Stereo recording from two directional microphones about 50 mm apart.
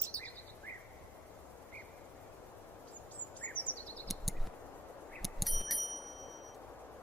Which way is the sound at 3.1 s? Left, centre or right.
Left.